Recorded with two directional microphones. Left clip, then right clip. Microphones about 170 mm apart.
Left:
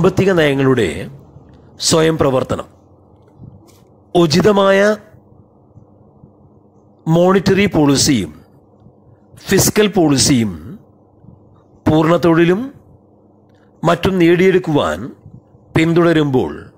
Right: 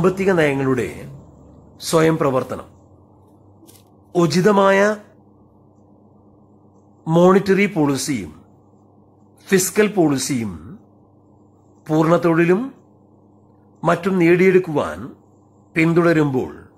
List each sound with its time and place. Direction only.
0.0 s speech: 30° left (ahead or behind)
4.1 s speech: 25° left (ahead or behind)
7.2 s speech: 25° left (ahead or behind)
9.4 s speech: 20° left (ahead or behind)
11.9 s speech: 25° left (ahead or behind)
13.8 s speech: 25° left (ahead or behind)